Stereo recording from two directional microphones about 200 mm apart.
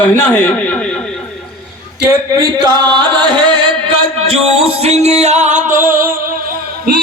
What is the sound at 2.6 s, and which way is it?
Chant, 20° right (ahead or behind).